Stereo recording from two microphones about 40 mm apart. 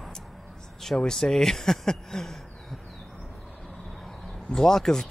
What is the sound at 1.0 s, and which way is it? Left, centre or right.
Speech, centre.